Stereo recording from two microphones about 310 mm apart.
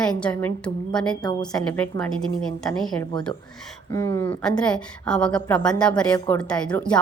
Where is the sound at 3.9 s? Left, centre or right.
Centre.